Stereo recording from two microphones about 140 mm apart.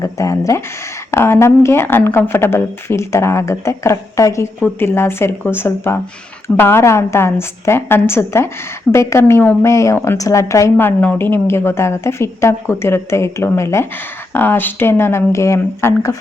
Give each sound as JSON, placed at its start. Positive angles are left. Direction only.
{"t": 0.0, "sound": "a woman's voice", "side_deg": 20}